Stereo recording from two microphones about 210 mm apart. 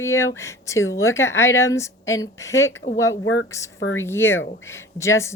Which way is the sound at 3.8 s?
65° left (ahead or behind).